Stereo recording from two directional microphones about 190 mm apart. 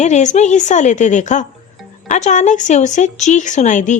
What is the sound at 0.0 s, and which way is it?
Speech, 40° left (ahead or behind).